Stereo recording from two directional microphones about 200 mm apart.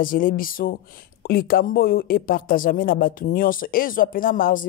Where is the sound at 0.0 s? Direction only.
45° left (ahead or behind).